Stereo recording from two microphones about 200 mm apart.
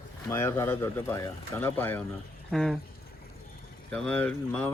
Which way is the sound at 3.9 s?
5° left (ahead or behind).